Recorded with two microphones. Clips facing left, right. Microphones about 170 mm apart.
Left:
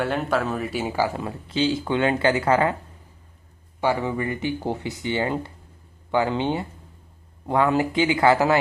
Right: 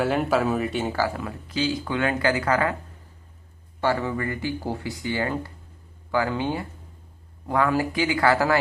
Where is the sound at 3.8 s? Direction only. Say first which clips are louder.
Left 1 dB; 15° left (ahead or behind).